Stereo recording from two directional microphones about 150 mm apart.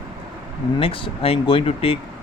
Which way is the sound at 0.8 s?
35° left (ahead or behind).